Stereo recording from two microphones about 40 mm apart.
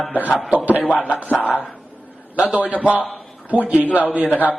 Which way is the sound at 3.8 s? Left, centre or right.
Left.